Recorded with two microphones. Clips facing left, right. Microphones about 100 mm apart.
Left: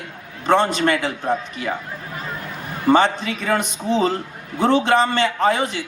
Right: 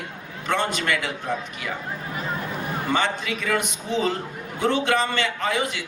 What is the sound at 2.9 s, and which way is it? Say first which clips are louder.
A man's voice: left 7 dB; 35° left (ahead or behind).